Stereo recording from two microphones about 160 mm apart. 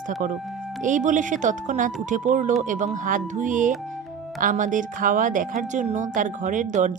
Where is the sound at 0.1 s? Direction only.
55° right (ahead or behind).